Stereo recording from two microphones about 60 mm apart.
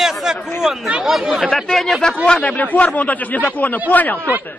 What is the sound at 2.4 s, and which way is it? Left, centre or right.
Speech, left.